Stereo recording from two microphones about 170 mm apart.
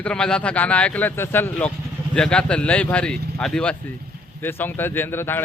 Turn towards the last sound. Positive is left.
turn(degrees=10)  # may be behind; listen again after turning